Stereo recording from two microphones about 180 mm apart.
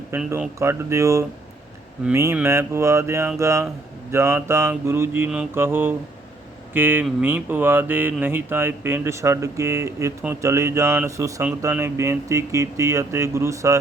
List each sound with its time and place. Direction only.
0.1 s speech: 10° right (ahead or behind)